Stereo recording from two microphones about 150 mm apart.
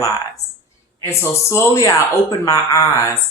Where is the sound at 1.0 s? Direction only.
20° left (ahead or behind).